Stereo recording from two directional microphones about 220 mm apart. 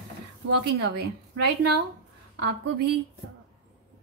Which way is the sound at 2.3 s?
50° right (ahead or behind).